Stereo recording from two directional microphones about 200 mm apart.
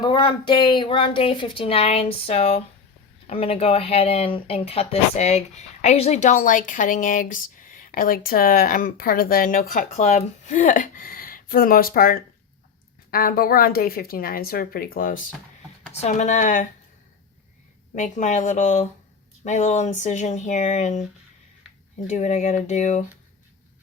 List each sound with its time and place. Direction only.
0.0 s a woman's voice: 25° left (ahead or behind); by 15.2 s 45° left (ahead or behind)
15.9 s speech: 35° left (ahead or behind)
17.9 s speech: 40° left (ahead or behind)
22.0 s speech: 35° left (ahead or behind)